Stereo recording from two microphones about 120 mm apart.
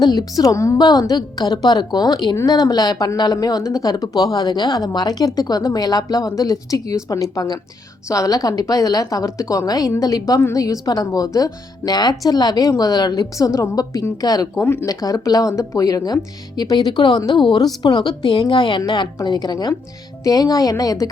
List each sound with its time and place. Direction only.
0.0 s a woman's voice: 35° left (ahead or behind)
14.6 s a woman's voice: 20° left (ahead or behind)
14.8 s speech: 30° left (ahead or behind)